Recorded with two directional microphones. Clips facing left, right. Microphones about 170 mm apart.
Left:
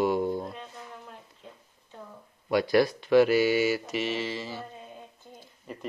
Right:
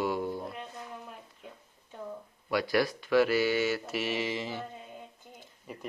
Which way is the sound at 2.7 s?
25° left (ahead or behind).